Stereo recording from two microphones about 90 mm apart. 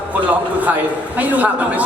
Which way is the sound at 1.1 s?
15° right (ahead or behind).